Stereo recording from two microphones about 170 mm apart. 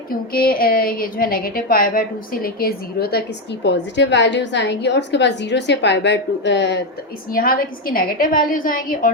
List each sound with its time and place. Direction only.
0.1 s a woman's voice: 60° left (ahead or behind); by 6.7 s 90° left
7.3 s a woman's voice: 55° left (ahead or behind)